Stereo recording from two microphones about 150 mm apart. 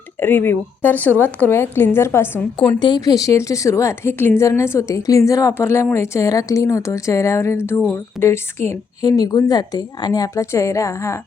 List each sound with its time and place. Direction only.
0.2 s a woman's voice: 15° left (ahead or behind)
2.6 s a woman's voice: 35° left (ahead or behind)